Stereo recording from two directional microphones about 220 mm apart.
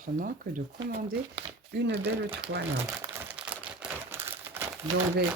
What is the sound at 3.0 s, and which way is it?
Crumpling, 10° right (ahead or behind).